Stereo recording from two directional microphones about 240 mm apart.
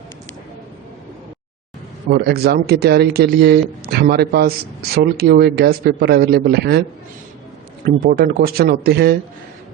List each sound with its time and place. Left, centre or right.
2.0 s speech: right
7.9 s speech: right